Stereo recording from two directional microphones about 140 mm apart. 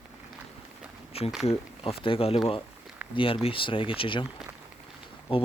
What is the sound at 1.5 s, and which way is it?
Speech, 45° left (ahead or behind).